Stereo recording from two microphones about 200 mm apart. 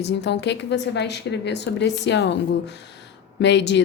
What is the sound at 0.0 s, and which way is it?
Speech, 60° left (ahead or behind).